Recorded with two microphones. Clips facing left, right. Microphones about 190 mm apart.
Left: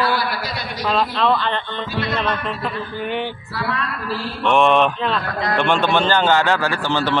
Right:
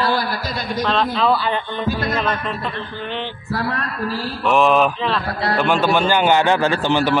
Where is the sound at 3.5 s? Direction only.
45° right (ahead or behind).